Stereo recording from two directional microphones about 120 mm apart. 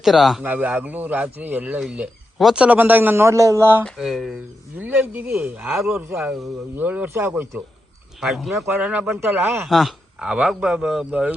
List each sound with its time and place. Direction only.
0.0 s speech: centre (ahead or behind)
0.4 s speech: 15° right (ahead or behind)
3.8 s speech: centre (ahead or behind)
4.8 s speech: 15° right (ahead or behind)
8.2 s speech: centre (ahead or behind)
8.6 s speech: 15° right (ahead or behind)
9.6 s speech: centre (ahead or behind)